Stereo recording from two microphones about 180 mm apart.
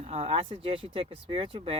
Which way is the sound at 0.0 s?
35° right (ahead or behind).